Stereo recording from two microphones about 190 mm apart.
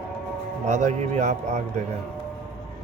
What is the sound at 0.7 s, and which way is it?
Speech, 40° right (ahead or behind).